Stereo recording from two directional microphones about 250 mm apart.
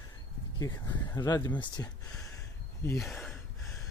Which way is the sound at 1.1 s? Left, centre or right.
Centre.